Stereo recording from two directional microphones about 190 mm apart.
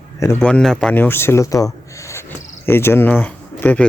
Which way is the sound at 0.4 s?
5° left (ahead or behind).